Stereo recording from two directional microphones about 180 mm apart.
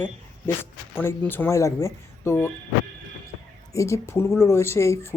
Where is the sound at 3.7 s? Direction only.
15° left (ahead or behind).